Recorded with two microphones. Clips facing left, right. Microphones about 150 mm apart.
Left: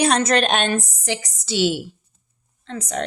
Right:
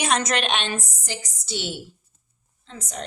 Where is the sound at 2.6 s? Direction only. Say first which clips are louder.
Left 9 dB; 70° left (ahead or behind).